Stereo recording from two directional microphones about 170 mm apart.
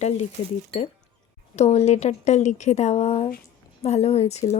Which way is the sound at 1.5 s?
40° left (ahead or behind).